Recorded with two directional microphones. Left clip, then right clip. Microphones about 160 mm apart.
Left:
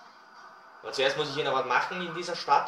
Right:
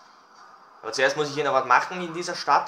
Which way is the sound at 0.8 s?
55° right (ahead or behind).